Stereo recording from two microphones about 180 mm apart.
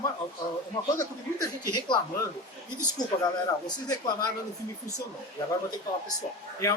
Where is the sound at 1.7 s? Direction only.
25° left (ahead or behind).